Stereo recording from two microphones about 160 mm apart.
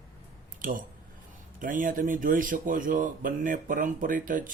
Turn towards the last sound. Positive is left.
turn(degrees=-55)  # may be behind; listen again after turning